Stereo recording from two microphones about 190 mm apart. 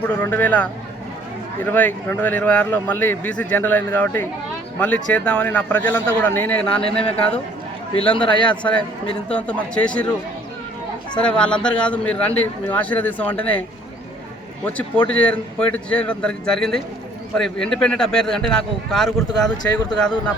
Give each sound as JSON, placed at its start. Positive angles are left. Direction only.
{"t": 0.0, "sound": "a man's voice", "side_deg": 10}
{"t": 7.9, "sound": "a man's voice", "side_deg": 25}
{"t": 9.3, "sound": "a man's voice", "side_deg": 5}